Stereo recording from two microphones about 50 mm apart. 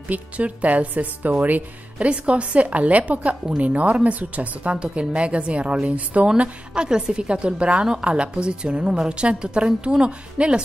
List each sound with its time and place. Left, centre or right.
0.1 s a woman's voice: right